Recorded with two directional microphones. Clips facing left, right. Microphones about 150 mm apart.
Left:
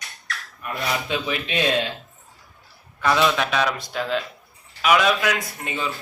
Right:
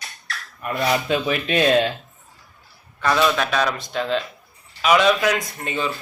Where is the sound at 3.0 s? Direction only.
15° left (ahead or behind).